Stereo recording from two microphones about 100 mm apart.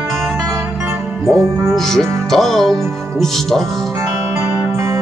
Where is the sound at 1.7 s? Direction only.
5° left (ahead or behind).